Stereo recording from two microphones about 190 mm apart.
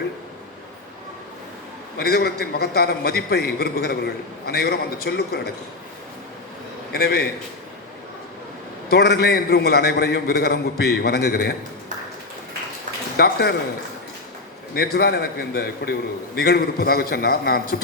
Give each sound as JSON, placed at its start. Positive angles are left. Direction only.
{"t": 2.0, "sound": "a man's voice", "side_deg": 55}
{"t": 6.9, "sound": "a man's voice", "side_deg": 55}
{"t": 8.9, "sound": "a man's voice", "side_deg": 55}
{"t": 13.1, "sound": "a man's voice", "side_deg": 55}
{"t": 14.8, "sound": "a man's voice", "side_deg": 55}